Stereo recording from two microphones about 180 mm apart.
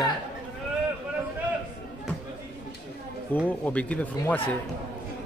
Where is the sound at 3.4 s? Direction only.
10° left (ahead or behind).